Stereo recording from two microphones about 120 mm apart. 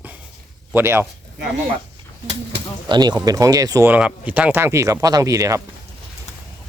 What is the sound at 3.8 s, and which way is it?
Speech, 10° right (ahead or behind).